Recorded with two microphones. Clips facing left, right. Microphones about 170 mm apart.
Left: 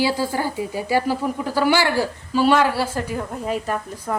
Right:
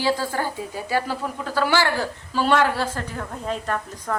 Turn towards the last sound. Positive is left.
turn(degrees=10)  # may be behind; listen again after turning